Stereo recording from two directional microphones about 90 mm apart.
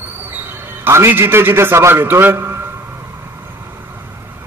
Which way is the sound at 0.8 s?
25° right (ahead or behind).